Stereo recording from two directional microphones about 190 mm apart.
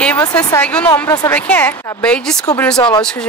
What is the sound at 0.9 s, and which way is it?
Speech, 20° left (ahead or behind).